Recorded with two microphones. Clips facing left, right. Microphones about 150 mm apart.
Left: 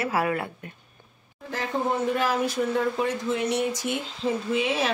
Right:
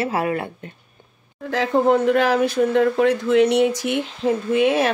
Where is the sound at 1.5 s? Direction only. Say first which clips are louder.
Right 10 dB; 80° right.